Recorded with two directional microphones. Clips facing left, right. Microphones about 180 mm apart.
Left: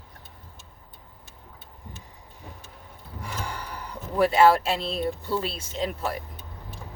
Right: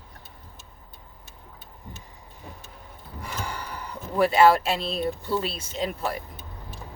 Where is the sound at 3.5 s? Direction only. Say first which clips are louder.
Right 1 dB; 5° right (ahead or behind).